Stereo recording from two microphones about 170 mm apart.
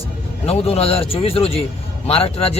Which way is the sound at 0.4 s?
35° left (ahead or behind).